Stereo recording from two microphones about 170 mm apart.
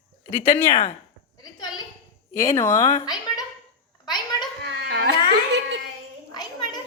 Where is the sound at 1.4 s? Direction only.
25° left (ahead or behind).